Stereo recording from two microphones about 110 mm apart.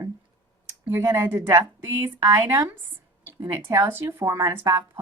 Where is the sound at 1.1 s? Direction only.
25° right (ahead or behind).